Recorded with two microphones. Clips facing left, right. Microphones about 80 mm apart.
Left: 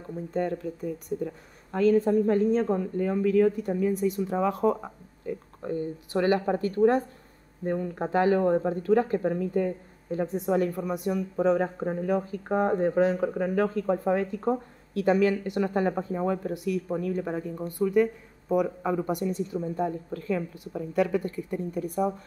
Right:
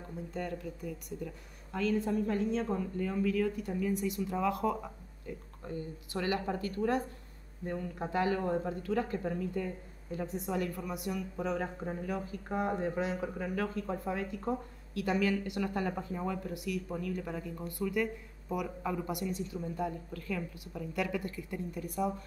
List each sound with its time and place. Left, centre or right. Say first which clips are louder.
0.3 s speech: left 10 dB; left